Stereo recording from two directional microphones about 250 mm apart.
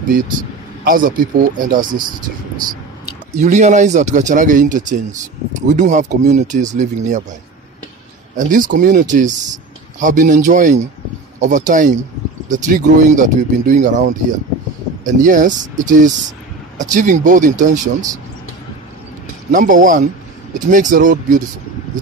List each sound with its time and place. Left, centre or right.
0.8 s speech: right
3.3 s speech: right
8.4 s speech: right
19.5 s speech: right